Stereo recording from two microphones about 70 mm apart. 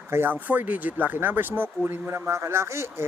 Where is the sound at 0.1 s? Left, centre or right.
Right.